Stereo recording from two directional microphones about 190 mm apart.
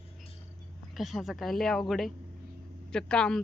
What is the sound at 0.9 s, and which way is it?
Speech, centre (ahead or behind).